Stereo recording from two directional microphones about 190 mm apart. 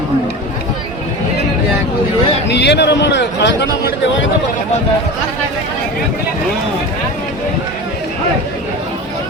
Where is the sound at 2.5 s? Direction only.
65° left (ahead or behind).